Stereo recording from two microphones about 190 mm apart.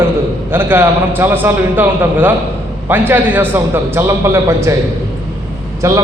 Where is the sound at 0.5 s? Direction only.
10° right (ahead or behind).